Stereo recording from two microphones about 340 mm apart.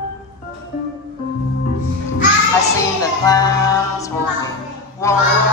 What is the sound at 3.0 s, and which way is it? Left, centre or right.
Music, centre.